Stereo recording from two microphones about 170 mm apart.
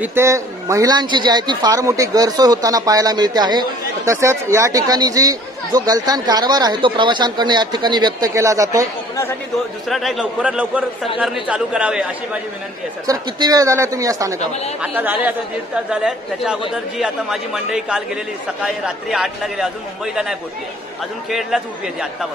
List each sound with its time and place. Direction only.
0.0 s speech: 15° right (ahead or behind)
9.8 s a man's voice: centre (ahead or behind)
13.0 s a man's voice: 20° right (ahead or behind); by 19.7 s centre (ahead or behind)
21.3 s a man's voice: centre (ahead or behind)